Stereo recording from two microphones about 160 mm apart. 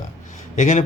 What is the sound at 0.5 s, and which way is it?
Speech, 50° left (ahead or behind).